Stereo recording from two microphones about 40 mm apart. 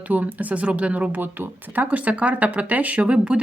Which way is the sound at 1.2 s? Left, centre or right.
Right.